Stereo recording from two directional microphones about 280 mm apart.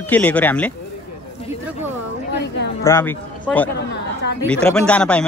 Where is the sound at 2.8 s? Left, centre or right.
Centre.